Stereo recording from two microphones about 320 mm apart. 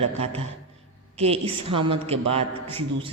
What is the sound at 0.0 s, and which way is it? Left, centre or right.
A man's voice, centre.